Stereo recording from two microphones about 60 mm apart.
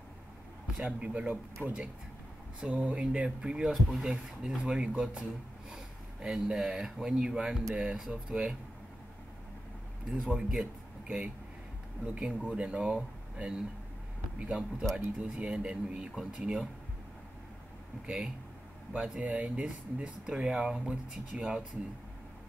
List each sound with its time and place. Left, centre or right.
0.8 s speech: right
3.7 s speech: centre
10.2 s speech: centre
10.6 s a man's voice: right
18.0 s speech: centre